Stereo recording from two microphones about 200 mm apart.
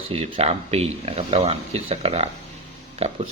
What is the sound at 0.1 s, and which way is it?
Speech, 30° right (ahead or behind).